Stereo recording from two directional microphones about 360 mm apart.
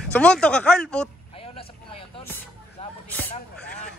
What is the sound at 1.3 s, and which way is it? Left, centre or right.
Vehicle, centre.